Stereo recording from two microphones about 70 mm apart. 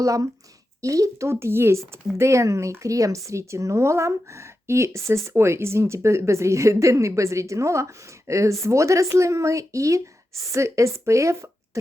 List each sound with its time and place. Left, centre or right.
0.0 s a woman's voice: right